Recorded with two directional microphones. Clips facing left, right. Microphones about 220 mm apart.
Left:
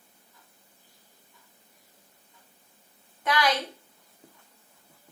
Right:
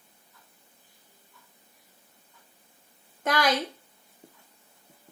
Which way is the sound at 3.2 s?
45° right (ahead or behind).